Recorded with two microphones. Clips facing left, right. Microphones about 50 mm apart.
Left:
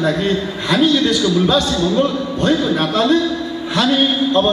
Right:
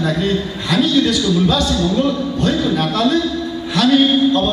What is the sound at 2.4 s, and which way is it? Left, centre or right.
A man's voice, left.